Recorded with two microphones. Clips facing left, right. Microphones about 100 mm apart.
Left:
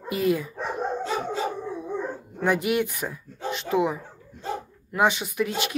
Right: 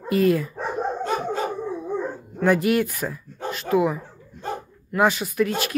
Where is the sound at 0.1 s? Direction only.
15° left (ahead or behind).